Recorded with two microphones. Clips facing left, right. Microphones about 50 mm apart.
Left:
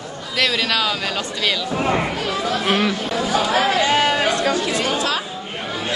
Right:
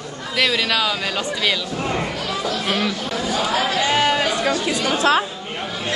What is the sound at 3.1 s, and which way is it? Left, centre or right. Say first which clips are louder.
Speech: left 2 dB; centre.